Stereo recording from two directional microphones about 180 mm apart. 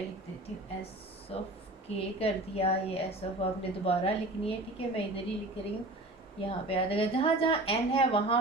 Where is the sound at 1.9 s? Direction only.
35° left (ahead or behind).